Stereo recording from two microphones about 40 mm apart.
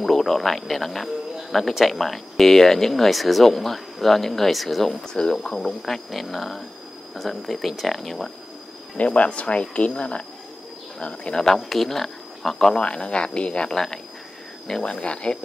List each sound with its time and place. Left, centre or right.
0.0 s speech: centre
5.0 s speech: left
8.9 s speech: left
11.4 s speech: centre
12.7 s speech: left